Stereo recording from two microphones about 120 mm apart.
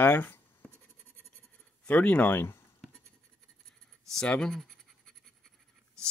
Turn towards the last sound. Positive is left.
turn(degrees=0)  # may be behind; listen again after turning